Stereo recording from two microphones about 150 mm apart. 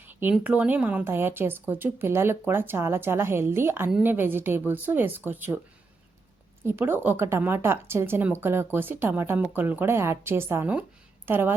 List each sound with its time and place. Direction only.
0.0 s a sound: 15° right (ahead or behind)
0.3 s a woman's voice: 10° right (ahead or behind)
6.6 s a woman's voice: 15° right (ahead or behind)